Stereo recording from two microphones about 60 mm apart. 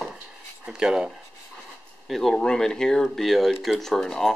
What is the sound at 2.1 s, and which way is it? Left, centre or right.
Speech, centre.